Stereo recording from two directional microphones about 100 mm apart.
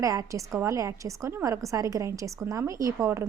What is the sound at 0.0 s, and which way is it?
Speech, 35° right (ahead or behind).